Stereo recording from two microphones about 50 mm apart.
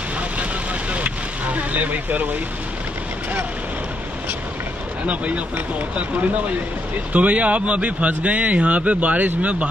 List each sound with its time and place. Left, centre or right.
0.9 s vehicle: right
5.0 s speech: right
7.1 s speech: right